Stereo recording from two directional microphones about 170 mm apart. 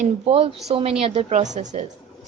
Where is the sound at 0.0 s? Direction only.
35° right (ahead or behind).